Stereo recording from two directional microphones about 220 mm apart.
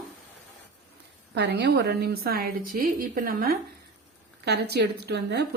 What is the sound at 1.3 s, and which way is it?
A woman's voice, 50° right (ahead or behind).